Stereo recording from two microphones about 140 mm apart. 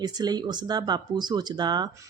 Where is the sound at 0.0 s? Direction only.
30° right (ahead or behind).